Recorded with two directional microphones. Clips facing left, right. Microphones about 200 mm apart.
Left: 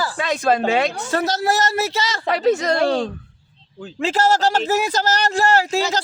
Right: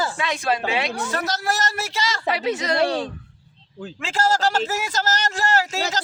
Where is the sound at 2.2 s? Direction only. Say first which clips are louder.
Left 7 dB; 45° left (ahead or behind).